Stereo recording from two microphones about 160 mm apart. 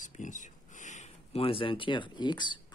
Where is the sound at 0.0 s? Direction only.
50° left (ahead or behind).